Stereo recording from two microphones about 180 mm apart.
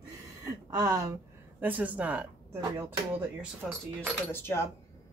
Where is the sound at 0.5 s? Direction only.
20° right (ahead or behind).